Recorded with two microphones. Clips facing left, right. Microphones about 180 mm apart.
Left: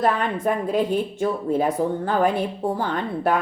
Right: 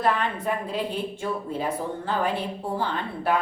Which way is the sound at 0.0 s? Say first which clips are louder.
Left 3 dB; 45° left (ahead or behind).